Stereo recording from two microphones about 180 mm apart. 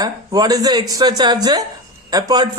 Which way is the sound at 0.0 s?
20° right (ahead or behind).